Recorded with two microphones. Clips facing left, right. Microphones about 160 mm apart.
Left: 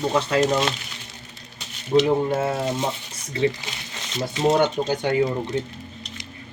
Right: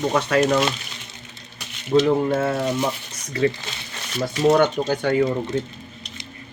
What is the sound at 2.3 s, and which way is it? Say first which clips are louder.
Speech: right 2 dB; 20° left (ahead or behind).